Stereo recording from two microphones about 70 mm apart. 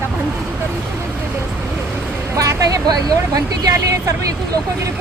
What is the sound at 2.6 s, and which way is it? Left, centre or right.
Speech, right.